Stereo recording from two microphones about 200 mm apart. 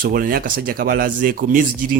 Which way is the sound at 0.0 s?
45° right (ahead or behind).